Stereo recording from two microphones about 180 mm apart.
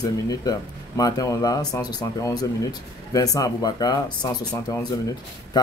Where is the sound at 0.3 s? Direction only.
20° left (ahead or behind).